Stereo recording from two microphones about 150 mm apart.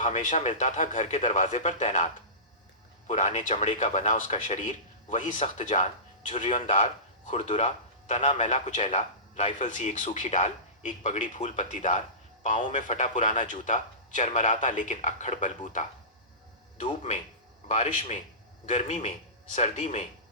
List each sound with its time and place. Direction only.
0.0 s speech: 55° left (ahead or behind)
3.1 s a man's voice: 55° left (ahead or behind)